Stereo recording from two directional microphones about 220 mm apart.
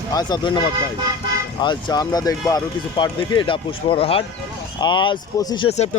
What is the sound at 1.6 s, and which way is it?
Speech, 20° left (ahead or behind).